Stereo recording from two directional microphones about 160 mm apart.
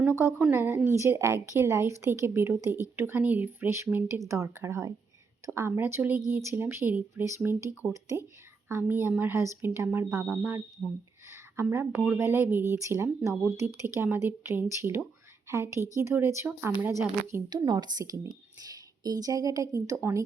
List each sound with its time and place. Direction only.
0.0 s speech: 15° right (ahead or behind)
10.8 s speech: 5° right (ahead or behind)
11.3 s a woman's voice: 15° right (ahead or behind)